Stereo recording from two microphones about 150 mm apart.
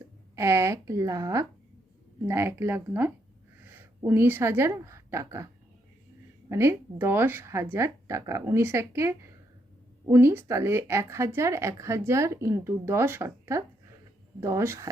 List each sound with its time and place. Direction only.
0.3 s speech: 20° right (ahead or behind)
6.5 s speech: 15° right (ahead or behind)